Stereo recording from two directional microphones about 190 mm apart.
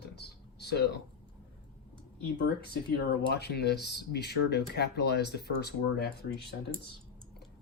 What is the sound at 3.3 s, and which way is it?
Speech, 60° left (ahead or behind).